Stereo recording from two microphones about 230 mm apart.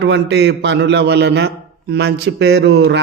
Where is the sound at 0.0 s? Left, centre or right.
Right.